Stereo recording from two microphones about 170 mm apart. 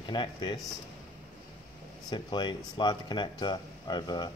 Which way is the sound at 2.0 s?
25° left (ahead or behind).